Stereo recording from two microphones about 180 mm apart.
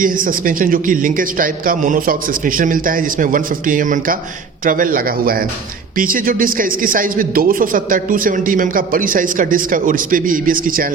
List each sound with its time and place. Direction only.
0.0 s a man's voice: 50° right (ahead or behind)